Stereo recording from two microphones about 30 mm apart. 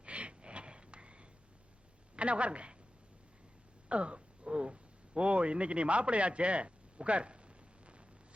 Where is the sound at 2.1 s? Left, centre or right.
Right.